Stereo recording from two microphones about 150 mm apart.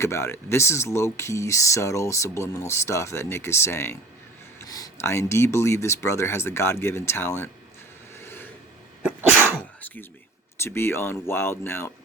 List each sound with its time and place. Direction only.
0.0 s speech: 15° left (ahead or behind)
8.1 s a sound: 15° left (ahead or behind)
9.6 s sneeze: 15° left (ahead or behind)
10.6 s speech: 15° left (ahead or behind)